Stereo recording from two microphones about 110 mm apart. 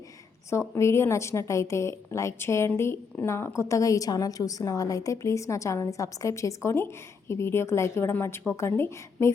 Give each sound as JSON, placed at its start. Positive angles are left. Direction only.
{"t": 0.7, "sound": "a woman's voice", "side_deg": 25}